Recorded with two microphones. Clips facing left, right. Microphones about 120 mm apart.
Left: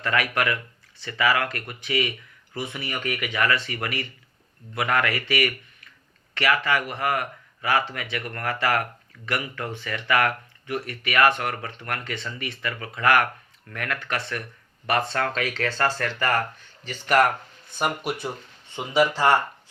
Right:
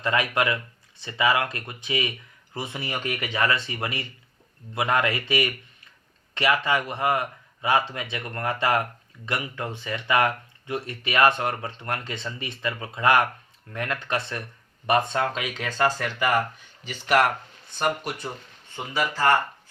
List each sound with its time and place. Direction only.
0.0 s speech: 20° right (ahead or behind)
5.3 s a sound: 25° right (ahead or behind)
6.3 s speech: 20° right (ahead or behind); by 18.3 s 5° left (ahead or behind)
18.8 s speech: 15° left (ahead or behind)